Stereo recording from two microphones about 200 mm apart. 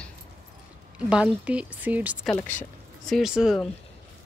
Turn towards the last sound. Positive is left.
turn(degrees=0)  # may be behind; listen again after turning